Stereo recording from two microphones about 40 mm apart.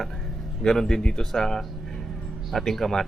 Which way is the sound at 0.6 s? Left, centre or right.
Centre.